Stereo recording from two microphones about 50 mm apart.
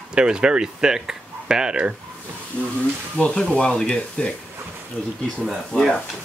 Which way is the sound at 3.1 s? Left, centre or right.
Centre.